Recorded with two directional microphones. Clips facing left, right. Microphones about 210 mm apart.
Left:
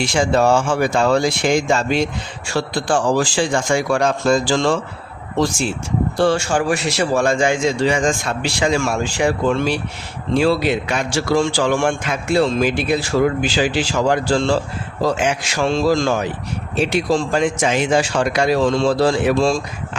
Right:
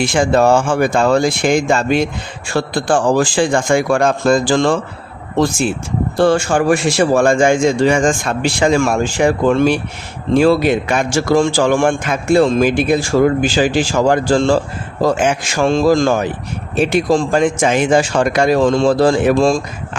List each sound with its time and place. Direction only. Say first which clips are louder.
0.0 s a man's voice: right 3 dB; 55° right (ahead or behind)